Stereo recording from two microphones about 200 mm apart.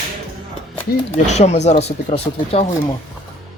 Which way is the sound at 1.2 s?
35° left (ahead or behind).